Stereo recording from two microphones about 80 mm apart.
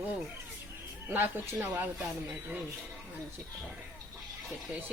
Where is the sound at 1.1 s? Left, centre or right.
Right.